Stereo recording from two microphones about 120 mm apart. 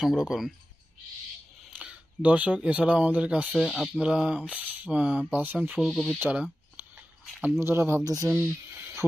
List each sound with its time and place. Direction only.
0.0 s speech: centre (ahead or behind)
1.7 s speech: 10° right (ahead or behind)
3.5 s speech: centre (ahead or behind)
5.8 s speech: centre (ahead or behind)
6.1 s a sound: 15° right (ahead or behind)
7.6 s speech: 20° right (ahead or behind)
8.0 s speech: 30° right (ahead or behind)
8.3 s speech: 15° right (ahead or behind)